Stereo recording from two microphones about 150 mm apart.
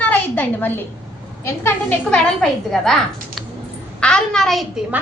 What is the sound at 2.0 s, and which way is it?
A woman's voice, 5° left (ahead or behind).